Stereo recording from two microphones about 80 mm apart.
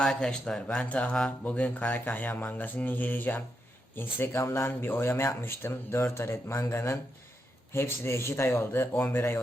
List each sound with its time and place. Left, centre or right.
0.0 s speech: centre; by 9.4 s left